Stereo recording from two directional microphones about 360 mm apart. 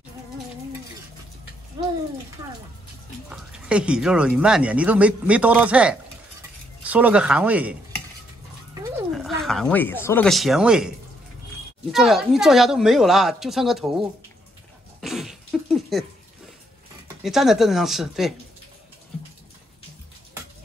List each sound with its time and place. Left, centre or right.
3.3 s speech: centre
8.9 s speech: centre
11.9 s speech: centre
15.0 s cough: centre
17.2 s speech: centre